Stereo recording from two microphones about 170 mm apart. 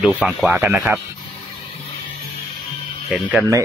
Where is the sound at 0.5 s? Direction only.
10° right (ahead or behind).